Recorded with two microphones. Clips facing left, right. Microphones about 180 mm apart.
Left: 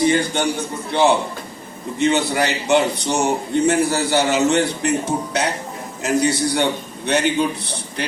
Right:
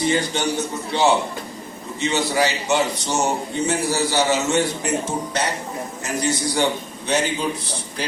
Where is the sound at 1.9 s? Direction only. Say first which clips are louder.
Left 3 dB; 55° left (ahead or behind).